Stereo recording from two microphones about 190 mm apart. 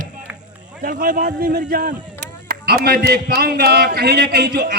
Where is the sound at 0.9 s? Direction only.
50° right (ahead or behind).